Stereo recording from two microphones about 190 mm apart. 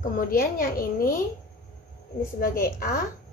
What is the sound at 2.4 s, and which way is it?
Speech, 50° left (ahead or behind).